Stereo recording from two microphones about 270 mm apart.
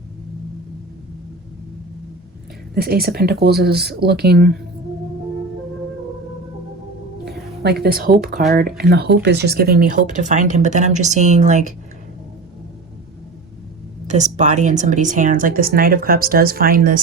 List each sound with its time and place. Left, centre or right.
2.7 s speech: right
7.3 s a sound: right
8.4 s speech: right
14.1 s speech: right